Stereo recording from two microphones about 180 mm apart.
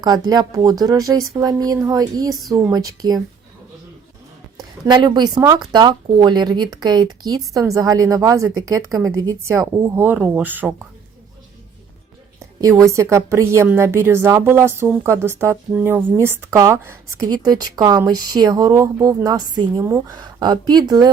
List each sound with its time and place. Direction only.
0.0 s speech: 20° right (ahead or behind)
4.9 s a woman's voice: 25° right (ahead or behind)
12.6 s a woman's voice: 15° right (ahead or behind)